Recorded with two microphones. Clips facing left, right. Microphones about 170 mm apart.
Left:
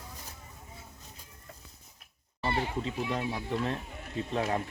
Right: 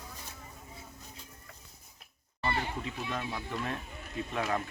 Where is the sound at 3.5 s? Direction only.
30° left (ahead or behind).